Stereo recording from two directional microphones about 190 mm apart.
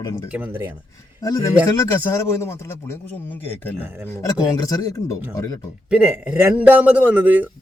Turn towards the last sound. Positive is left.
turn(degrees=-10)  # may be behind; listen again after turning